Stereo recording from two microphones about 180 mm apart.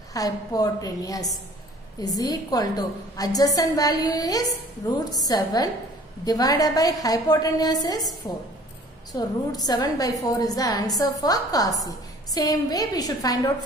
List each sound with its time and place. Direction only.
0.1 s a woman's voice: 20° left (ahead or behind)
9.1 s a woman's voice: 20° left (ahead or behind)